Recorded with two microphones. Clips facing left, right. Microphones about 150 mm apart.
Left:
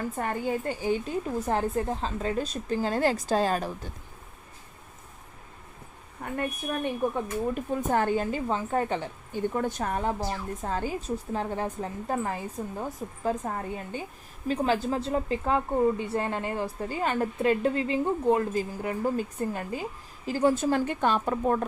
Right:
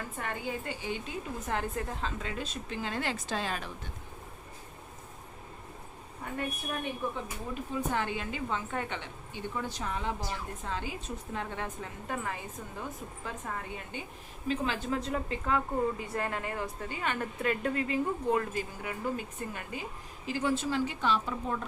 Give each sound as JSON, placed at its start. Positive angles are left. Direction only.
{"t": 0.2, "sound": "a woman's voice", "side_deg": 40}
{"t": 7.0, "sound": "a woman's voice", "side_deg": 45}